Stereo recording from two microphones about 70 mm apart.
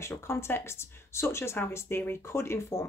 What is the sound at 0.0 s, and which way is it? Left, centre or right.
Speech, left.